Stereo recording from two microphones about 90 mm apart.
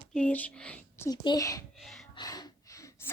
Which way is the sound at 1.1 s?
55° left (ahead or behind).